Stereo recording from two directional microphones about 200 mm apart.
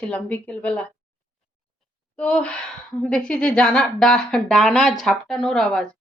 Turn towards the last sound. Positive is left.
turn(degrees=0)  # may be behind; listen again after turning